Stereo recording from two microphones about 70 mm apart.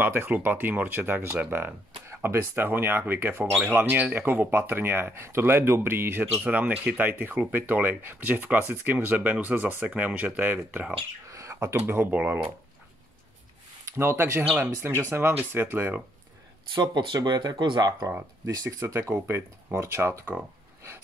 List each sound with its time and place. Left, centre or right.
0.0 s speech: right
6.4 s speech: right
11.2 s bird: right
11.8 s speech: right
12.2 s speech: right
13.8 s speech: right
16.8 s speech: right
18.4 s speech: right